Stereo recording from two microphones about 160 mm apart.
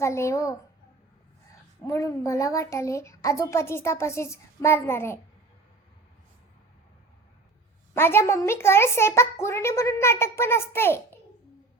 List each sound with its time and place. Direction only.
0.0 s a woman's voice: 20° left (ahead or behind)
1.8 s a woman's voice: 20° left (ahead or behind)
7.9 s a woman's voice: 15° left (ahead or behind)